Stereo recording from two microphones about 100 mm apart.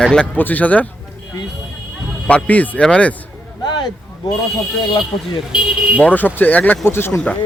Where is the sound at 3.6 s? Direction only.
45° left (ahead or behind).